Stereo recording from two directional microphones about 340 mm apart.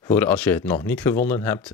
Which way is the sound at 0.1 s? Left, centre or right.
Centre.